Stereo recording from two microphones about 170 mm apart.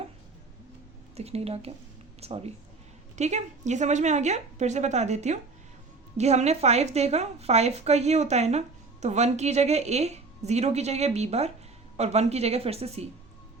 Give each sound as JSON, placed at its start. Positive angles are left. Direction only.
{"t": 1.1, "sound": "a woman's voice", "side_deg": -35}